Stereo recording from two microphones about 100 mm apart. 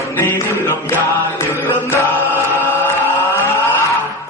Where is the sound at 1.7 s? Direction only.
20° left (ahead or behind).